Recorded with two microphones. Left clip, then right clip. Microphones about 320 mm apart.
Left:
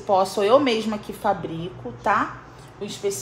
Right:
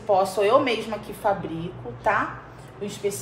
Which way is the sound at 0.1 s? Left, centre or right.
Left.